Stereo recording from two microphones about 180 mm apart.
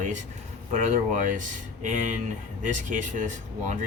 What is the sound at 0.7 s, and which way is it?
Speech, 45° right (ahead or behind).